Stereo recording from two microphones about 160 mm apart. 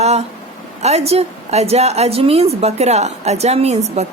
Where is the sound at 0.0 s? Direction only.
40° right (ahead or behind).